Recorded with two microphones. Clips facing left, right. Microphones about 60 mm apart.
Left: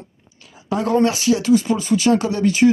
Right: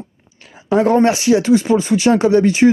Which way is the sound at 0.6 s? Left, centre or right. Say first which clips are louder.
Right 5 dB; right.